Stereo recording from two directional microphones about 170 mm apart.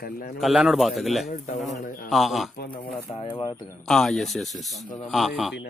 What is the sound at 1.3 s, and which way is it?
Speech, 45° left (ahead or behind).